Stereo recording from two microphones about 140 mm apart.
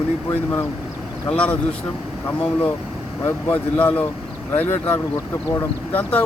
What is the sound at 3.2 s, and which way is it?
Speech, 10° left (ahead or behind).